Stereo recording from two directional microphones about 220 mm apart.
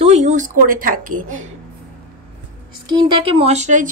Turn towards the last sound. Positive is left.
turn(degrees=-35)  # may be behind; listen again after turning